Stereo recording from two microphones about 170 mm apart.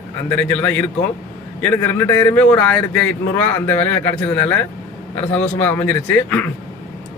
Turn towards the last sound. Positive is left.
turn(degrees=10)  # may be behind; listen again after turning